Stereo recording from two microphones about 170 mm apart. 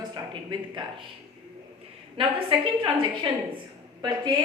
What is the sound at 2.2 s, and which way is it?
A woman's voice, 30° right (ahead or behind).